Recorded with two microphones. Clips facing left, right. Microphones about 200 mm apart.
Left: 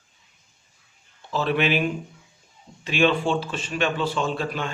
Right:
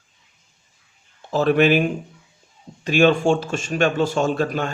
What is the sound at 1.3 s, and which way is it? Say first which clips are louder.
A man's voice: right 7 dB; 45° right (ahead or behind).